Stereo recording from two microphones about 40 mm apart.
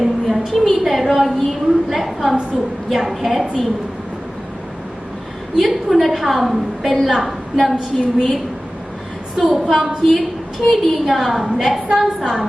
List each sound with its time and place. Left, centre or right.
0.0 s a sound: centre
2.9 s a woman's voice: centre
5.5 s a woman's voice: centre
9.4 s a woman's voice: centre